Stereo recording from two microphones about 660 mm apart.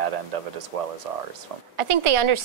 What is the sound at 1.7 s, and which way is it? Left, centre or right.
Speech, right.